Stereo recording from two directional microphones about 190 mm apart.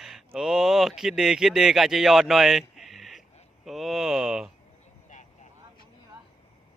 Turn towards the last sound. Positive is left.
turn(degrees=40)  # may be behind; listen again after turning